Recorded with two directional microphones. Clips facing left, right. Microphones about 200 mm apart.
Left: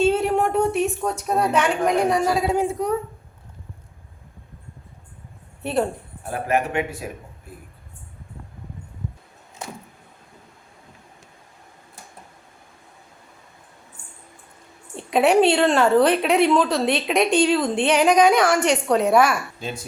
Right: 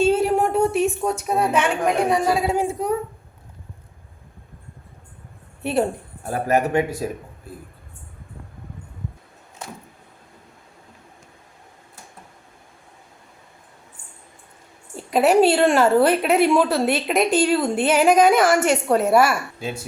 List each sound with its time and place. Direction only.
0.0 s a sound: centre (ahead or behind)
2.0 s a woman's voice: 5° right (ahead or behind)
6.2 s a man's voice: 40° right (ahead or behind)
14.9 s a woman's voice: 5° right (ahead or behind)